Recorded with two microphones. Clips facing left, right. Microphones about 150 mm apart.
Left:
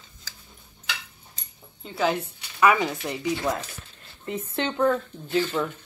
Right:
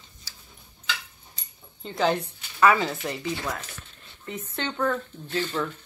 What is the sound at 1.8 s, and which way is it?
A woman's voice, 5° left (ahead or behind).